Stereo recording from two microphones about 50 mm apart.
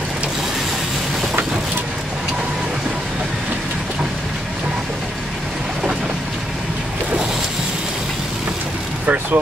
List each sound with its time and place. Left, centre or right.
9.0 s vehicle: right